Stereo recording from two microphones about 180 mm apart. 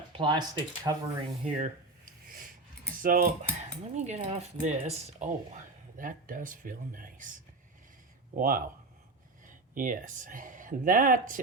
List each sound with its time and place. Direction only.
0.1 s speech: 25° right (ahead or behind)
1.5 s speech: 45° right (ahead or behind)
3.0 s speech: 50° right (ahead or behind)
3.4 s speech: 40° right (ahead or behind)
6.0 s speech: 50° right (ahead or behind)
8.4 s speech: 50° right (ahead or behind)
9.7 s speech: 50° right (ahead or behind)